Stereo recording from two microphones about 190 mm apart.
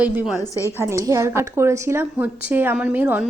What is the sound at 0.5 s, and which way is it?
Speech, 15° left (ahead or behind).